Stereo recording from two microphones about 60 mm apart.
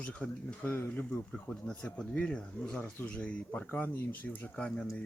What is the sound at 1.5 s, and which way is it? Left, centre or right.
Speech, centre.